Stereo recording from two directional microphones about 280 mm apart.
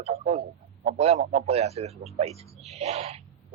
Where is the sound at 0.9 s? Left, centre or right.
Right.